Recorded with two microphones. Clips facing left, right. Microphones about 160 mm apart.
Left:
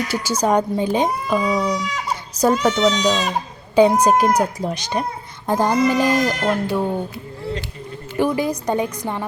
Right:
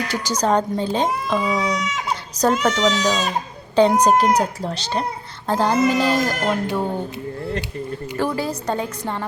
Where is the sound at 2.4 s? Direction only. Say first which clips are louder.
Left 2 dB; 15° right (ahead or behind).